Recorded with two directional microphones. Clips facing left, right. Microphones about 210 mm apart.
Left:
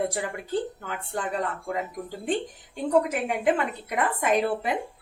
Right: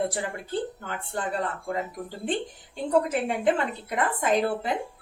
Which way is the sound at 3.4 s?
10° left (ahead or behind).